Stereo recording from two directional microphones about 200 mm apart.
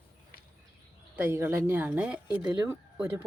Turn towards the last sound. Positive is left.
turn(degrees=-10)  # may be behind; listen again after turning